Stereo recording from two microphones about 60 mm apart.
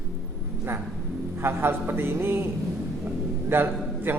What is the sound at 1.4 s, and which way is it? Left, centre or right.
Speech, right.